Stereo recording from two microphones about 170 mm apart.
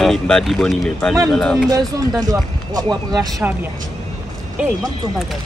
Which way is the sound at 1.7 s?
20° right (ahead or behind).